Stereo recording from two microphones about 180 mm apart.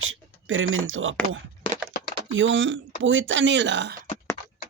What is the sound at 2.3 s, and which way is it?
Speech, 90° right.